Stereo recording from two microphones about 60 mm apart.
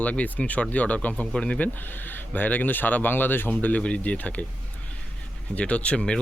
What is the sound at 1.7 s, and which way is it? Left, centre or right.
Speech, left.